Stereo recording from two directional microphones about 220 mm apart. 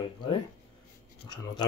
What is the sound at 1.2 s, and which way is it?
Speech, 20° left (ahead or behind).